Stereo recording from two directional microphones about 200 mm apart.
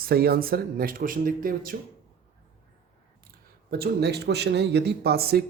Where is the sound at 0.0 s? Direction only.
50° right (ahead or behind).